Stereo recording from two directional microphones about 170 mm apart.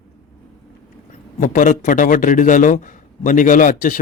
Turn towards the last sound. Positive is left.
turn(degrees=55)  # may be behind; listen again after turning